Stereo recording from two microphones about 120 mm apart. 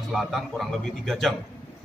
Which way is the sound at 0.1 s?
Centre (ahead or behind).